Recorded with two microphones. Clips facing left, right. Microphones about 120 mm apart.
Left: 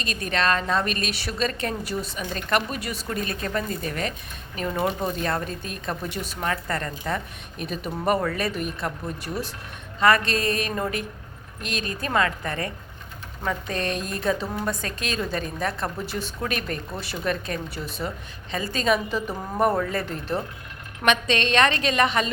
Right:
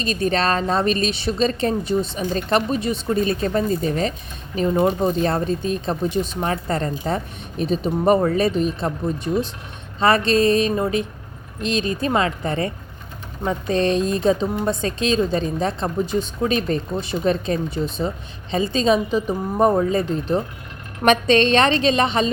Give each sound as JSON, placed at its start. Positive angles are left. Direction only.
{"t": 0.0, "sound": "a woman's voice", "side_deg": -30}
{"t": 21.0, "sound": "a woman's voice", "side_deg": -35}